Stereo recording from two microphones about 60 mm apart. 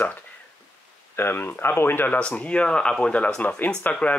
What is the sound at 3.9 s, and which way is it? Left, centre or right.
Speech, left.